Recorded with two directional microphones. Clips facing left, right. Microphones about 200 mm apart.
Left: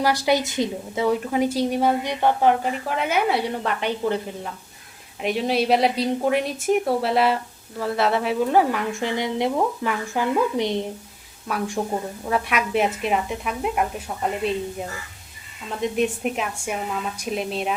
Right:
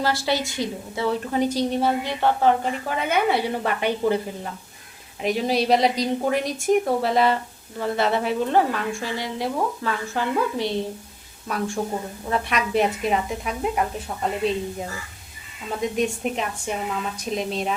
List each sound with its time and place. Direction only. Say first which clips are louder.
0.0 s a woman's voice: left 3 dB; 15° left (ahead or behind)
1.3 s a woman's voice: left 1 dB; 5° left (ahead or behind)
2.8 s a woman's voice: right 1 dB; centre (ahead or behind)
5.2 s a woman's voice: even; centre (ahead or behind); by 10.8 s 20° left (ahead or behind)
11.8 s a woman's voice: left 1 dB; 5° left (ahead or behind)
15.8 s a woman's voice: left 1 dB; 5° left (ahead or behind)